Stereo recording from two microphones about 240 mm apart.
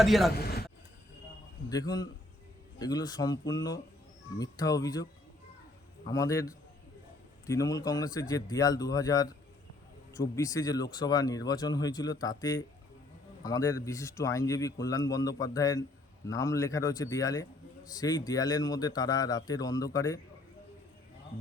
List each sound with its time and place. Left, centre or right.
0.0 s speech: centre
0.3 s a sound: left
1.7 s speech: centre
6.1 s speech: centre